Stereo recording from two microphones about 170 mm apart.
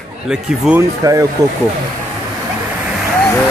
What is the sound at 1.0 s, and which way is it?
Speech, 20° right (ahead or behind).